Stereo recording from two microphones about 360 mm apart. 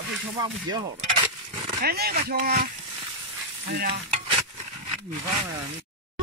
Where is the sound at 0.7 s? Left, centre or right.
Centre.